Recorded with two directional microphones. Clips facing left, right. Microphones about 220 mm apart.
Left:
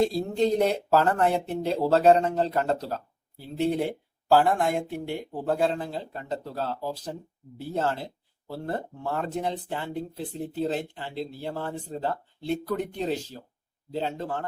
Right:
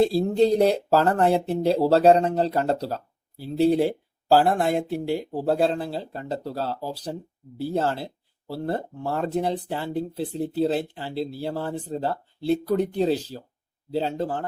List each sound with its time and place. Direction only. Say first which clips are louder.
0.0 s speech: right 4 dB; 35° right (ahead or behind)